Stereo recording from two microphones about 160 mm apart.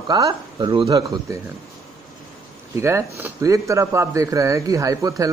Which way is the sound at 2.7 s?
15° right (ahead or behind).